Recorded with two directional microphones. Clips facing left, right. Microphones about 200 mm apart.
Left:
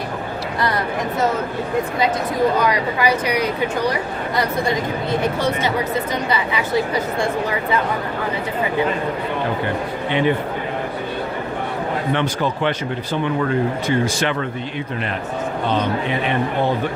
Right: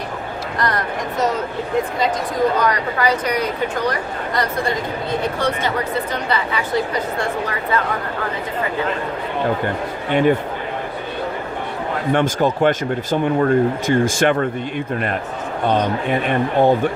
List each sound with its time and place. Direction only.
2.6 s a woman's voice: 10° left (ahead or behind)
10.1 s speech: 45° right (ahead or behind)
12.1 s speech: 45° right (ahead or behind)
15.7 s speech: 50° right (ahead or behind)